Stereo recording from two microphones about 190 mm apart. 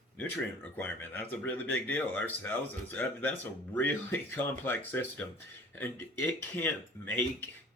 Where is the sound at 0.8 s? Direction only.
10° left (ahead or behind).